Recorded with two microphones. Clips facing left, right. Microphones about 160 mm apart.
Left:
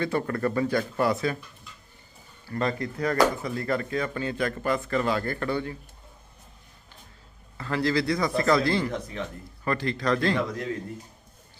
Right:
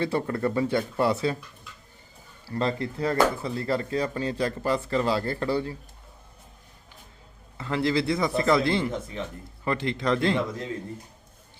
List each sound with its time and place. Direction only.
0.0 s speech: 25° right (ahead or behind)
2.5 s speech: 25° right (ahead or behind)
7.6 s speech: 20° right (ahead or behind)